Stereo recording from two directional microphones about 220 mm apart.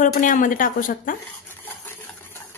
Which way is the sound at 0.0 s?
35° left (ahead or behind).